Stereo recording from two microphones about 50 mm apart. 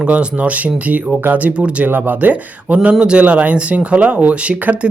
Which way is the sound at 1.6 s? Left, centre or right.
Right.